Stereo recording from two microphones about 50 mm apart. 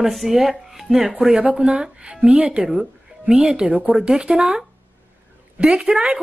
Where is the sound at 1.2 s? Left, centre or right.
Right.